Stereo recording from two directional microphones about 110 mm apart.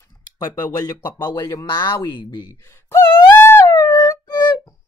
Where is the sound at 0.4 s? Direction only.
40° left (ahead or behind).